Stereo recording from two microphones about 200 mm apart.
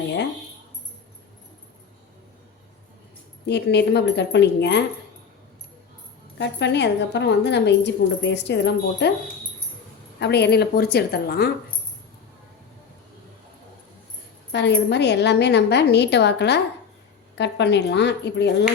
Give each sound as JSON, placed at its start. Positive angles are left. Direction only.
{"t": 3.4, "sound": "a woman's voice", "side_deg": 60}
{"t": 6.4, "sound": "a woman's voice", "side_deg": 60}
{"t": 10.2, "sound": "a woman's voice", "side_deg": 55}
{"t": 14.5, "sound": "a woman's voice", "side_deg": 60}